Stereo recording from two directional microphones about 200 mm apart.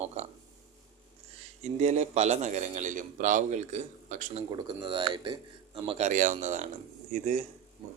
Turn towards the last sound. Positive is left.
turn(degrees=-35)  # may be behind; listen again after turning